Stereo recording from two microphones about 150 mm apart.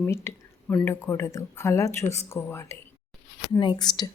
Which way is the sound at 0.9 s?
20° left (ahead or behind).